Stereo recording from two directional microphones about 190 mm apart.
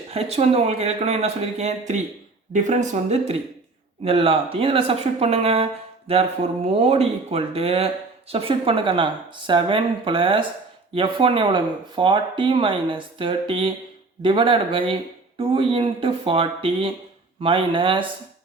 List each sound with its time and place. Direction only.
0.1 s speech: 35° right (ahead or behind)